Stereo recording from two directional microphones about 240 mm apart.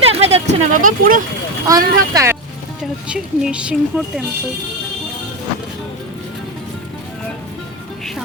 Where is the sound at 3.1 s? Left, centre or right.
Centre.